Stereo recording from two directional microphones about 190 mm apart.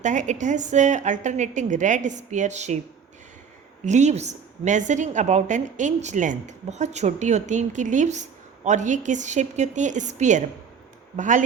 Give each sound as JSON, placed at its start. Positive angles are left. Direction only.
{"t": 0.0, "sound": "a woman's voice", "side_deg": -40}
{"t": 3.8, "sound": "a woman's voice", "side_deg": -40}